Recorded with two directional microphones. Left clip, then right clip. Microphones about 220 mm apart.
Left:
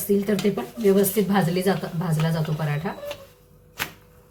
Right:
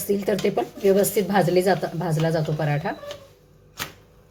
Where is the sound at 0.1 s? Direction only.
25° right (ahead or behind).